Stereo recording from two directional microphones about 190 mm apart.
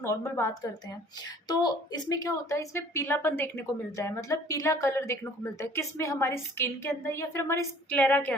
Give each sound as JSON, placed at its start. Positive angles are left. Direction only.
{"t": 0.0, "sound": "a woman's voice", "side_deg": 15}